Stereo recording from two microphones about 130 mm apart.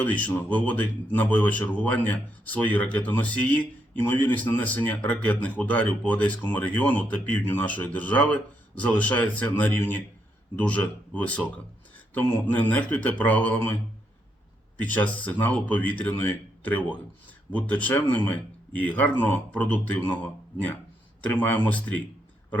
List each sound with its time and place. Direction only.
0.0 s speech: 10° left (ahead or behind)
14.8 s speech: 10° left (ahead or behind)